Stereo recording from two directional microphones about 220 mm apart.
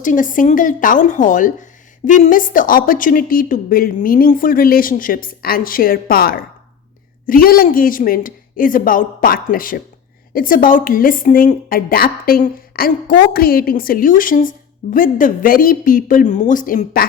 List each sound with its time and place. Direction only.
0.0 s a woman's voice: 35° left (ahead or behind)